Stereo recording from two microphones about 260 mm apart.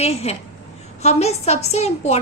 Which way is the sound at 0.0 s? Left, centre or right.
Left.